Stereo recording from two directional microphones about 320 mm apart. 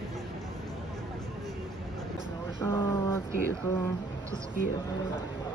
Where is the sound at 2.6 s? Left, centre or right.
Centre.